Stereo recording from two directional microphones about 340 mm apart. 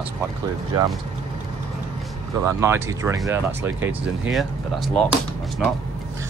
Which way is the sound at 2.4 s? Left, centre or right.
Centre.